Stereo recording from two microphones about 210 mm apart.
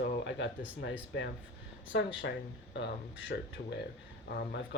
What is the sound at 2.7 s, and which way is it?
Speech, 60° left (ahead or behind).